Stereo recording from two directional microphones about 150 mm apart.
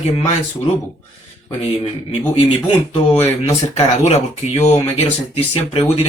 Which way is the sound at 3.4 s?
45° left (ahead or behind).